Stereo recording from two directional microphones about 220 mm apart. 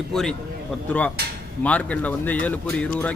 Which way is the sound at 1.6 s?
5° left (ahead or behind).